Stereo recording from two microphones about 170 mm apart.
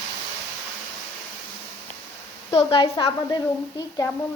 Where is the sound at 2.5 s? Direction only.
30° left (ahead or behind).